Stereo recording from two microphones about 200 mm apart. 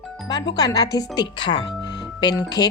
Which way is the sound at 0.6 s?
20° left (ahead or behind).